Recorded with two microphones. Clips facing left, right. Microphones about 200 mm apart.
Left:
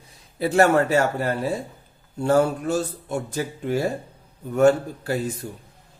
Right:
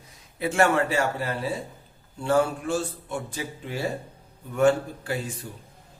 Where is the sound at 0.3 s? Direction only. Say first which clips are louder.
Left 4 dB; 35° left (ahead or behind).